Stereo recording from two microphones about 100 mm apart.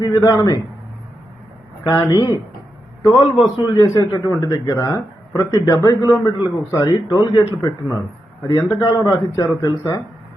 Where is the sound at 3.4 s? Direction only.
35° left (ahead or behind).